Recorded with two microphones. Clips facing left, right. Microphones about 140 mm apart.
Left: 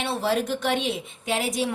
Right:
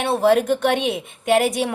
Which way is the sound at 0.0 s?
55° right (ahead or behind).